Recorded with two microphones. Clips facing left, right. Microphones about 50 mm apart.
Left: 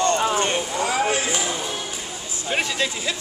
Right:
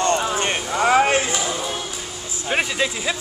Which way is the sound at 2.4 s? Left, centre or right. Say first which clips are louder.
Right 2 dB; centre.